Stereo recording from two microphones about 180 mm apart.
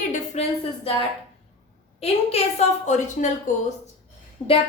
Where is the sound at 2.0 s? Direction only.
35° left (ahead or behind).